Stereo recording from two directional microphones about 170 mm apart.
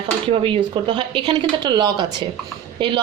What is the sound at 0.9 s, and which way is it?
A woman's voice, 30° right (ahead or behind).